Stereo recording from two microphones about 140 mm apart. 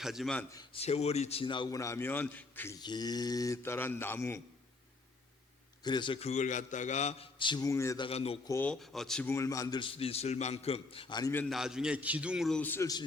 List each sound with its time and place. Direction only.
0.0 s a man's voice: centre (ahead or behind)
0.7 s a man's voice: 50° left (ahead or behind); by 2.7 s 15° left (ahead or behind)
2.7 s speech: 30° left (ahead or behind)
5.8 s a man's voice: 35° left (ahead or behind)
6.2 s a man's voice: 60° left (ahead or behind)
7.3 s a man's voice: 35° left (ahead or behind)
7.7 s speech: 20° left (ahead or behind)
7.9 s a man's voice: 40° left (ahead or behind)
8.6 s a man's voice: 5° left (ahead or behind)
9.2 s a man's voice: 20° left (ahead or behind); by 11.2 s 40° left (ahead or behind)
11.2 s a man's voice: 15° left (ahead or behind)
11.4 s a man's voice: 5° right (ahead or behind)
12.5 s a man's voice: 15° left (ahead or behind)